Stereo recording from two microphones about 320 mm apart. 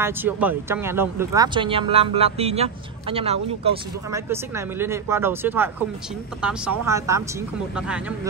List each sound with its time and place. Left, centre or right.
0.0 s speech: centre